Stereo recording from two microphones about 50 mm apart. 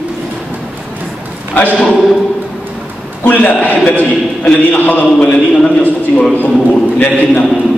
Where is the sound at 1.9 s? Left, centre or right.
Centre.